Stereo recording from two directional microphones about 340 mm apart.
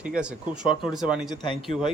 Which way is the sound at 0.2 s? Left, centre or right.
Centre.